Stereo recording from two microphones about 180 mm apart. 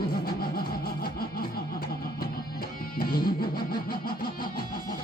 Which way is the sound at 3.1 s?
55° left (ahead or behind).